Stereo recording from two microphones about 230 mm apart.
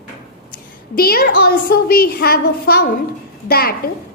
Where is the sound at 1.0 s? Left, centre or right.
Left.